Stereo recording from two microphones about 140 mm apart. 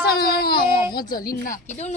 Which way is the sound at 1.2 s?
75° left (ahead or behind).